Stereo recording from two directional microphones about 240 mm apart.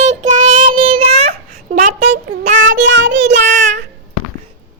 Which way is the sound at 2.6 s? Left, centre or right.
Right.